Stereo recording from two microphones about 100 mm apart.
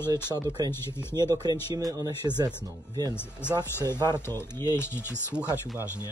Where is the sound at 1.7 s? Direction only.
35° right (ahead or behind).